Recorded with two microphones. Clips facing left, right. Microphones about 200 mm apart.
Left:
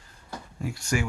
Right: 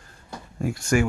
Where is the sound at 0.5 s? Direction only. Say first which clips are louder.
Right 6 dB; 50° right (ahead or behind).